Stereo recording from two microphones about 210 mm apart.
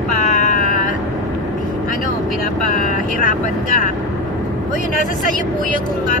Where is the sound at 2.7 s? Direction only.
40° left (ahead or behind).